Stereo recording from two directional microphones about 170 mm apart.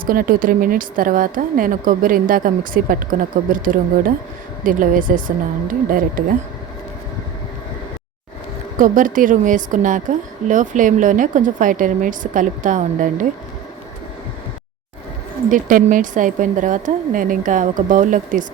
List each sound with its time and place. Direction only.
0.0 s a woman's voice: 55° right (ahead or behind)
5.6 s music: 55° right (ahead or behind)
8.8 s a woman's voice: 50° right (ahead or behind)
15.4 s a woman's voice: 50° right (ahead or behind)